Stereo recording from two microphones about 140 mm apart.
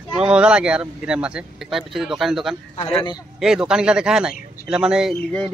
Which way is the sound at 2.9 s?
40° left (ahead or behind).